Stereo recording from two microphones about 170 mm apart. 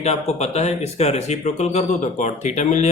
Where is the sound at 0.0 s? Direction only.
40° left (ahead or behind).